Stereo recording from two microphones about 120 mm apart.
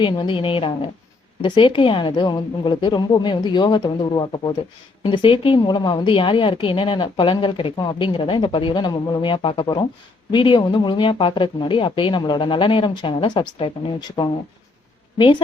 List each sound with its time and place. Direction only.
0.0 s a woman's voice: 45° left (ahead or behind)